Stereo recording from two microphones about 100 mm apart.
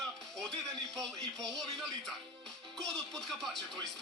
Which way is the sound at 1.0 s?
5° left (ahead or behind).